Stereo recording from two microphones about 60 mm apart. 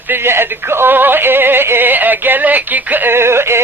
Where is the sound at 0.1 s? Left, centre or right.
Right.